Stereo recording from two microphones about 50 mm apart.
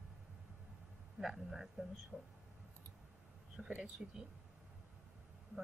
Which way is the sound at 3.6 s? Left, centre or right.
Centre.